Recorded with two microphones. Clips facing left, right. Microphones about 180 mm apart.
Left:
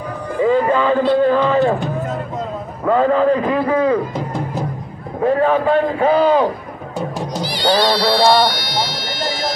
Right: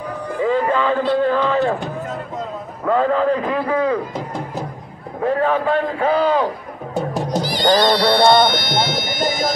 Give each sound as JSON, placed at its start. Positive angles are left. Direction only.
{"t": 0.4, "sound": "speech", "side_deg": 10}
{"t": 2.8, "sound": "a man's voice", "side_deg": 5}
{"t": 5.2, "sound": "a man's voice", "side_deg": 10}
{"t": 7.0, "sound": "music", "side_deg": -45}
{"t": 7.6, "sound": "a man's voice", "side_deg": 5}
{"t": 8.5, "sound": "bagpipes", "side_deg": -50}